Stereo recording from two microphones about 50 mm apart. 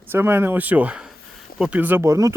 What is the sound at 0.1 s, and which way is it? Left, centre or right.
Speech, right.